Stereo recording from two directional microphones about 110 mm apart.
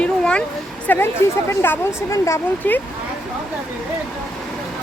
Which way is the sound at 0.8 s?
20° left (ahead or behind).